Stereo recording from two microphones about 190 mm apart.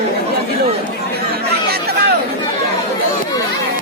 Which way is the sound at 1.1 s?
55° right (ahead or behind).